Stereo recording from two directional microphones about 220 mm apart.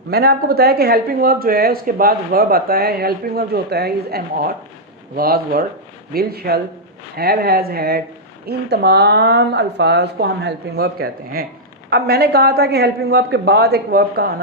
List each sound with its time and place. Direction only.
0.1 s speech: 45° right (ahead or behind)